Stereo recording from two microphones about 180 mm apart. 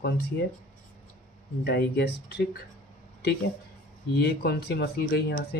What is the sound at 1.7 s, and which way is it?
Speech, 65° left (ahead or behind).